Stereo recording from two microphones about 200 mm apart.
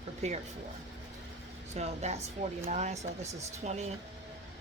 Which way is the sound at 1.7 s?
35° right (ahead or behind).